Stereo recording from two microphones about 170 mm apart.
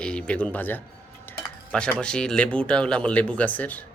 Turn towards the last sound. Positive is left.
turn(degrees=10)  # may be behind; listen again after turning